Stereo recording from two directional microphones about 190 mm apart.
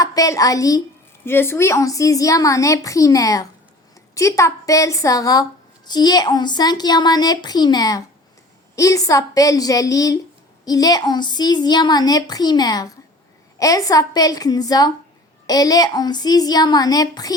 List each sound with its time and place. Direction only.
0.0 s a woman's voice: 20° left (ahead or behind)